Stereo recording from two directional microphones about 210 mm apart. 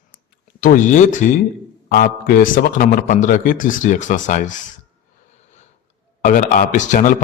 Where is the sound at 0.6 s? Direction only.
40° left (ahead or behind).